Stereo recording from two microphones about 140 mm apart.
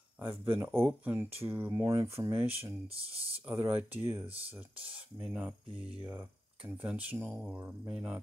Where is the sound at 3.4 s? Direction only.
15° right (ahead or behind).